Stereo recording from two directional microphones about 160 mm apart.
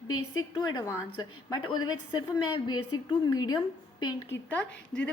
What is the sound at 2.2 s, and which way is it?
Speech, 25° left (ahead or behind).